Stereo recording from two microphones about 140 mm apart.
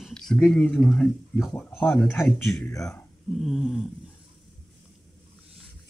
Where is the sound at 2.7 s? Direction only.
20° left (ahead or behind).